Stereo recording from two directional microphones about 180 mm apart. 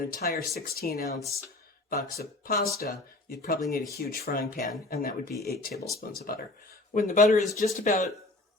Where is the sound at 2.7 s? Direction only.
60° left (ahead or behind).